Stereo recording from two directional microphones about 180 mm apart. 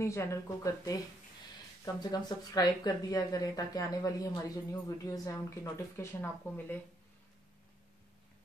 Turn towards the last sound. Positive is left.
turn(degrees=10)  # may be behind; listen again after turning